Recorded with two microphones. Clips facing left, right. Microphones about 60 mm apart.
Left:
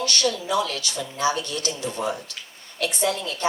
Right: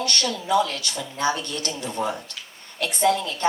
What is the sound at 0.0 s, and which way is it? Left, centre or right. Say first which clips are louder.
A woman's voice: left 2 dB; right.